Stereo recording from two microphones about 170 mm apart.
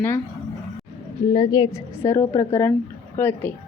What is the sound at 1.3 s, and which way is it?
A woman's voice, 25° left (ahead or behind).